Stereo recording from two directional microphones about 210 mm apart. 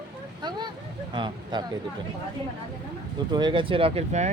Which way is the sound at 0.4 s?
20° right (ahead or behind).